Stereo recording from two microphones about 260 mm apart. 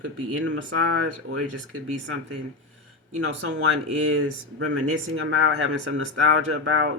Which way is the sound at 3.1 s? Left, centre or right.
Right.